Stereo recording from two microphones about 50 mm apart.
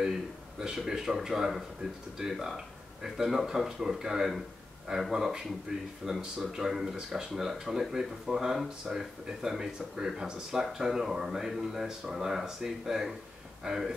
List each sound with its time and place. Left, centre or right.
0.6 s speech: centre